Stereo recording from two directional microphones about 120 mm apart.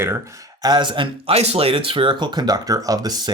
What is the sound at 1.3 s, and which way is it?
Speech, 55° right (ahead or behind).